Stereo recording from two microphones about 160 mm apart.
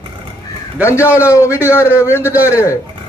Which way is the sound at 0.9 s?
15° left (ahead or behind).